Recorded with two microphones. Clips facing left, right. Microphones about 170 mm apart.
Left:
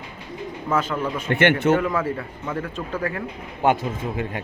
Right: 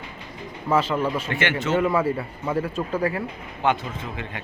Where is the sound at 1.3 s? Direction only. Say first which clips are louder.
Left 7 dB; 55° left (ahead or behind).